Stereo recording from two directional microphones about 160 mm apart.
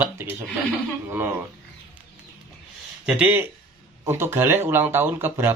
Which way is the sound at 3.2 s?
10° right (ahead or behind).